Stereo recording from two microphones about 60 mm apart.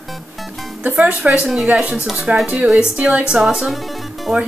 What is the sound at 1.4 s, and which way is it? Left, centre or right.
A woman's voice, centre.